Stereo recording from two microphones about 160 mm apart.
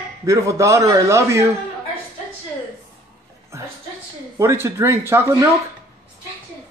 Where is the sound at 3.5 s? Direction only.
15° right (ahead or behind).